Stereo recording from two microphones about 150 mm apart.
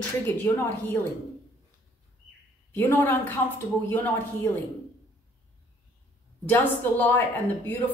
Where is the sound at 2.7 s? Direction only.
10° left (ahead or behind).